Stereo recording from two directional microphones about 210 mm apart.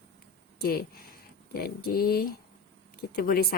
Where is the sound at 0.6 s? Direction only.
45° left (ahead or behind).